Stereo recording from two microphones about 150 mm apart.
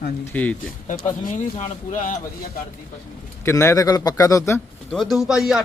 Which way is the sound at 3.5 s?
20° left (ahead or behind).